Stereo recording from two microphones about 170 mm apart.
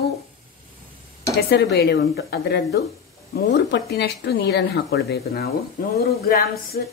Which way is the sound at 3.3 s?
80° left.